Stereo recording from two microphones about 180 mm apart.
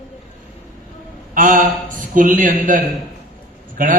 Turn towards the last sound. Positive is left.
turn(degrees=-50)  # may be behind; listen again after turning